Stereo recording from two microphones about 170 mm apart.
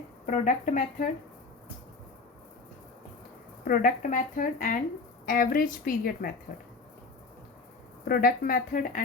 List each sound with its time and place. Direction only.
0.3 s speech: 50° left (ahead or behind)
3.6 s a woman's voice: 55° left (ahead or behind)
8.0 s a woman's voice: 60° left (ahead or behind)